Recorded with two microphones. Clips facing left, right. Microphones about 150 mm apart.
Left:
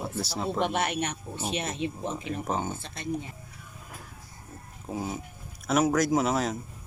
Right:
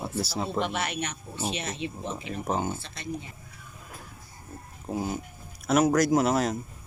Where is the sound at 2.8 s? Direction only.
50° left (ahead or behind).